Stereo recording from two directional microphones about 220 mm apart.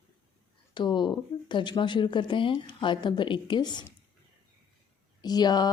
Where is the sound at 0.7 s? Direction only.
20° left (ahead or behind).